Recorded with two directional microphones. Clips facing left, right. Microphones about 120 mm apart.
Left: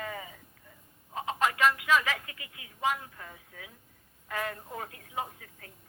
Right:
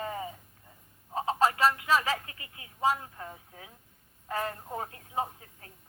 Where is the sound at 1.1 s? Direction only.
35° right (ahead or behind).